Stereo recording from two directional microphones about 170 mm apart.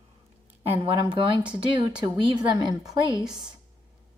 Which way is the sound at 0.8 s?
30° right (ahead or behind).